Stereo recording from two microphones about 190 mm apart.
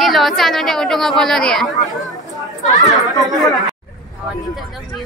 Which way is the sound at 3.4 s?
Centre (ahead or behind).